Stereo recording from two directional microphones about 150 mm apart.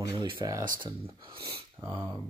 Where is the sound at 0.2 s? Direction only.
35° right (ahead or behind).